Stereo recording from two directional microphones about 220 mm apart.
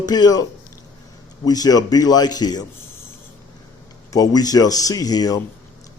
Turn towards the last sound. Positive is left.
turn(degrees=15)  # may be behind; listen again after turning